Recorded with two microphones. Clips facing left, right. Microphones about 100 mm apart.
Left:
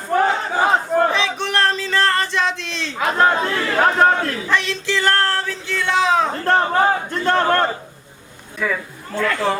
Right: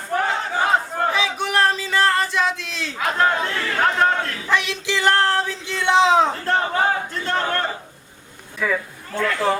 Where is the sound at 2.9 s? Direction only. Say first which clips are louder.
Left 3 dB; 25° left (ahead or behind).